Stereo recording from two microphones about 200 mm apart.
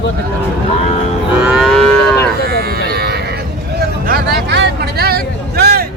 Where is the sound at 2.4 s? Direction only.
50° right (ahead or behind).